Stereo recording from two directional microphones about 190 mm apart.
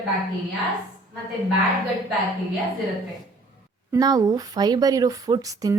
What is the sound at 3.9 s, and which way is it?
A woman's voice, 20° right (ahead or behind).